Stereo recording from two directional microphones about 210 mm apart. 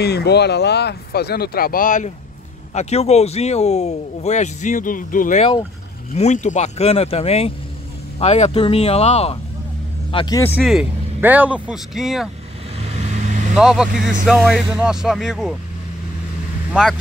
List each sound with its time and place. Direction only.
0.0 s speech: 50° left (ahead or behind); by 9.4 s 30° left (ahead or behind)
10.1 s speech: 20° left (ahead or behind)
10.5 s speech: 5° right (ahead or behind)
12.8 s vehicle: 30° right (ahead or behind)
13.6 s speech: centre (ahead or behind)
16.8 s speech: 5° right (ahead or behind)